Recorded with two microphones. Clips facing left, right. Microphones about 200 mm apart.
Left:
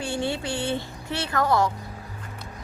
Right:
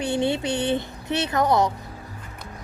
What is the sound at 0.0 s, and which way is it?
Speech, 20° right (ahead or behind).